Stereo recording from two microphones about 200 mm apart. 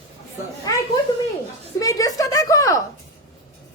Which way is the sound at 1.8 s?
15° left (ahead or behind).